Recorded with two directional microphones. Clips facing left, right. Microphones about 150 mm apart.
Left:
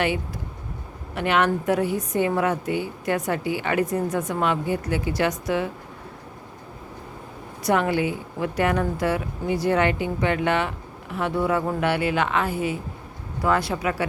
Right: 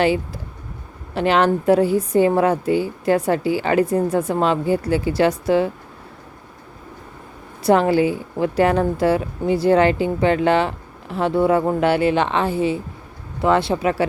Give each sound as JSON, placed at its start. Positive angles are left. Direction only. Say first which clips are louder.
{"t": 1.1, "sound": "speech", "louder": "right 5 dB", "side_deg": -30}
{"t": 7.6, "sound": "speech", "louder": "right 6 dB", "side_deg": -30}